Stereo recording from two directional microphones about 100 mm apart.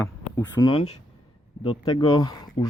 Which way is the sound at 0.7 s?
80° left.